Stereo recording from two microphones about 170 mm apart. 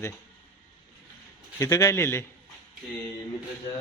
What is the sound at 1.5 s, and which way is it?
Speech, 20° left (ahead or behind).